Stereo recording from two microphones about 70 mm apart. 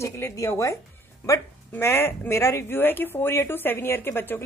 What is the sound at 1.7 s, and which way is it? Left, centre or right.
Speech, left.